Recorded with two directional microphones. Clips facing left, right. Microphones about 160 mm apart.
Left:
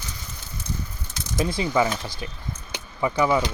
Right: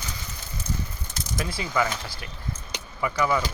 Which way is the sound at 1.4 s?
25° left (ahead or behind).